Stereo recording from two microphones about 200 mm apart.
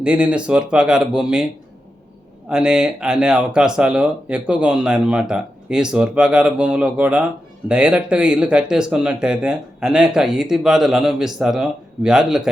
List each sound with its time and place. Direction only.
0.0 s speech: 5° right (ahead or behind)
2.5 s speech: 5° right (ahead or behind)